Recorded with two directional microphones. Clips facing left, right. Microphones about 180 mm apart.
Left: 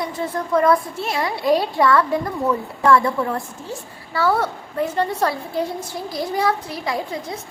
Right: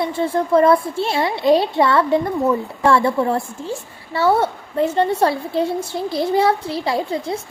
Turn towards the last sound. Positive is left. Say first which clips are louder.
# right 4 dB
turn(degrees=-30)  # may be behind; listen again after turning